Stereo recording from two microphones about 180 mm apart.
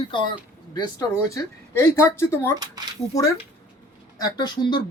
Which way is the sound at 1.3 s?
15° left (ahead or behind).